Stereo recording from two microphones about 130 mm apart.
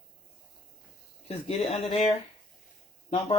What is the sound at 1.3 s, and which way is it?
Speech, 50° left (ahead or behind).